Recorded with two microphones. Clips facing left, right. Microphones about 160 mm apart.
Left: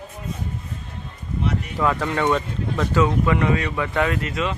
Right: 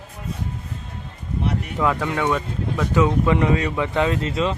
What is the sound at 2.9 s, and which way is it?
Speech, 20° right (ahead or behind).